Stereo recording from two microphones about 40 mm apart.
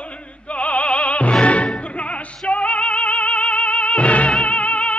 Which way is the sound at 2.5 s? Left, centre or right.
Left.